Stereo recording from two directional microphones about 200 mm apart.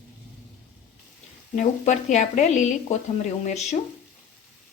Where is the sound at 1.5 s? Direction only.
35° left (ahead or behind).